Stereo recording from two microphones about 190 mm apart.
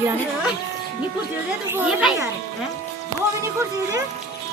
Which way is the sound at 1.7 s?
Centre (ahead or behind).